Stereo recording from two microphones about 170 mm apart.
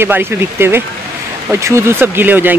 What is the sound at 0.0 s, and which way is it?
Speech, 15° right (ahead or behind).